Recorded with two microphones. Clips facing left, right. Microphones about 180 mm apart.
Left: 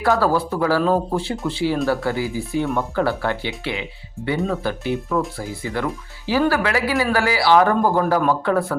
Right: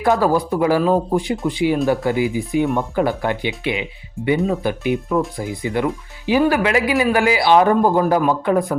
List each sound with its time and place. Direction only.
0.0 s a man's voice: 15° right (ahead or behind)